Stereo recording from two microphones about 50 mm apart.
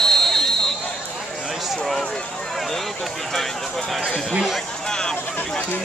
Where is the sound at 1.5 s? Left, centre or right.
Centre.